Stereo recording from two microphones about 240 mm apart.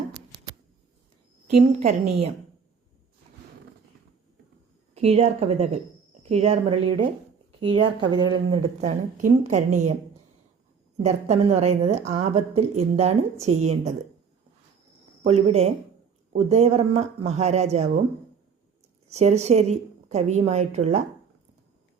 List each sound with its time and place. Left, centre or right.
1.5 s a woman's voice: right
4.9 s a woman's voice: right
11.0 s a woman's voice: right
15.2 s a woman's voice: right
19.0 s a woman's voice: right